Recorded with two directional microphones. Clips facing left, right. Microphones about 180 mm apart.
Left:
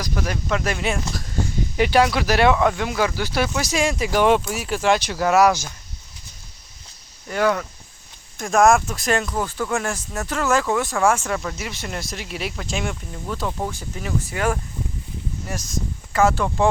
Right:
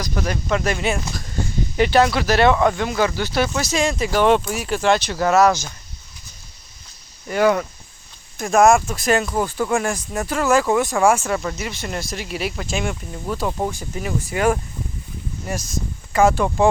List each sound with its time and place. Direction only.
0.0 s speech: 5° left (ahead or behind)
7.3 s speech: 15° right (ahead or behind)
8.4 s speech: 5° right (ahead or behind)